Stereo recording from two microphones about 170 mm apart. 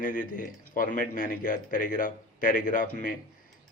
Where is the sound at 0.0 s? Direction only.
55° left (ahead or behind).